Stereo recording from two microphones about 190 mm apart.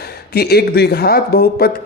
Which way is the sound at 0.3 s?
55° left (ahead or behind).